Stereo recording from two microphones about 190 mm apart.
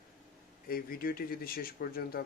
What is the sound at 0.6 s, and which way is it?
Speech, 50° left (ahead or behind).